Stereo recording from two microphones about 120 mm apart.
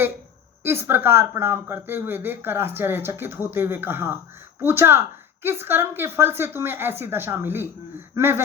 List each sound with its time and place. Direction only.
0.6 s speech: 20° right (ahead or behind)